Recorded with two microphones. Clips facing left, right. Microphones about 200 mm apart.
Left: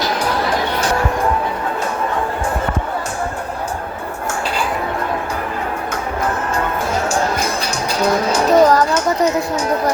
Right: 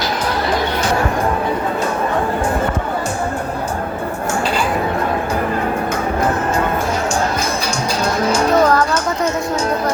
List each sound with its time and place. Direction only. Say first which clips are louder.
8.3 s music: left 1 dB; 20° left (ahead or behind)